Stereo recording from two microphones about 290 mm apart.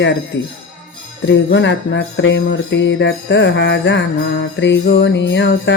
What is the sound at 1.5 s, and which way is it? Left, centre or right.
Music, left.